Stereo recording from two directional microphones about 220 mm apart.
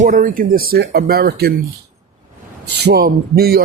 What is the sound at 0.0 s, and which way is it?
Speech, 40° right (ahead or behind).